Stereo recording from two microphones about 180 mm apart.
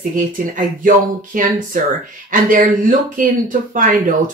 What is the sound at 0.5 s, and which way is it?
Speech, 45° right (ahead or behind).